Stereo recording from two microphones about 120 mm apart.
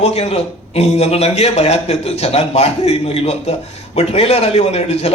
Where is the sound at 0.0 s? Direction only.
60° left (ahead or behind).